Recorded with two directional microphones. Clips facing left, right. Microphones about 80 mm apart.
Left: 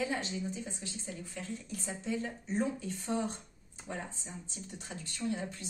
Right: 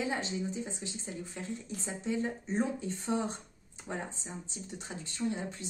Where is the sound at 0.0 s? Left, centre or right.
Right.